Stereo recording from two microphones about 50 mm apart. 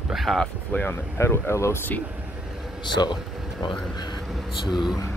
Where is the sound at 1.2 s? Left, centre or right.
Left.